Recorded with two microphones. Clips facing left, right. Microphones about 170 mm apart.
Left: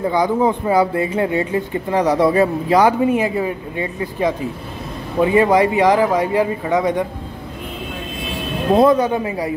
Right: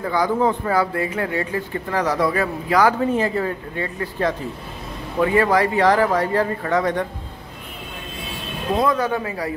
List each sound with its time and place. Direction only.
0.0 s speech: 20° left (ahead or behind)
8.7 s speech: 30° left (ahead or behind)